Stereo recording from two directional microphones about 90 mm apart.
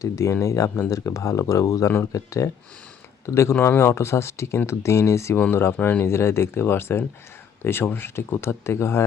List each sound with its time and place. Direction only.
0.0 s speech: 35° left (ahead or behind)